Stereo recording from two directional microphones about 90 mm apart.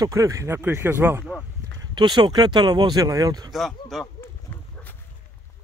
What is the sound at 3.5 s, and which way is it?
Speech, centre (ahead or behind).